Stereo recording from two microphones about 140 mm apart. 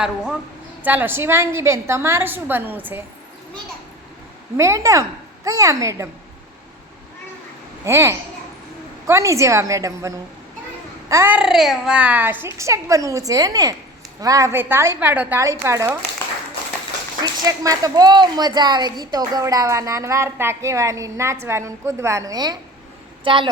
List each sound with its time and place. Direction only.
0.0 s a woman's voice: 5° right (ahead or behind)
4.5 s a woman's voice: 20° right (ahead or behind)
7.9 s a woman's voice: 20° right (ahead or behind)
11.3 s a woman's voice: 5° right (ahead or behind); by 16.0 s 20° right (ahead or behind)
17.4 s a woman's voice: 25° right (ahead or behind)